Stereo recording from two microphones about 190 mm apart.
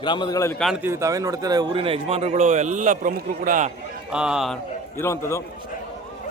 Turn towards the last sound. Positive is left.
turn(degrees=15)  # may be behind; listen again after turning